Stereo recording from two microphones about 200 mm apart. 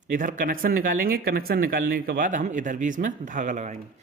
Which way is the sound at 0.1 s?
40° right (ahead or behind).